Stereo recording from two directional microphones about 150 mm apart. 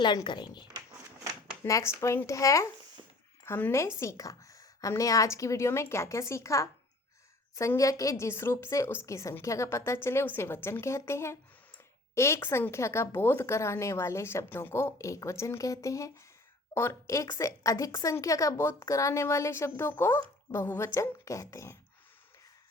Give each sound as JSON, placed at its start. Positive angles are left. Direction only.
{"t": 0.0, "sound": "speech", "side_deg": 30}
{"t": 1.6, "sound": "a woman's voice", "side_deg": 20}